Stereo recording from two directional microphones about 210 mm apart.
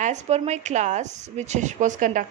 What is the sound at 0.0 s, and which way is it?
A woman's voice, 35° right (ahead or behind).